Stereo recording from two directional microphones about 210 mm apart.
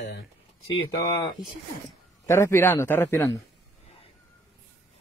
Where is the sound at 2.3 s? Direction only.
15° left (ahead or behind).